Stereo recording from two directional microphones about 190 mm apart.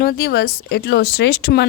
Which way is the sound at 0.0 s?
55° left (ahead or behind).